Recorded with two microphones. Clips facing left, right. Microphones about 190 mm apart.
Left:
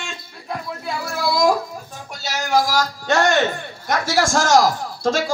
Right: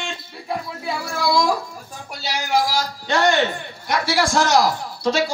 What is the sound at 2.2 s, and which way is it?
A man's voice, 45° left (ahead or behind).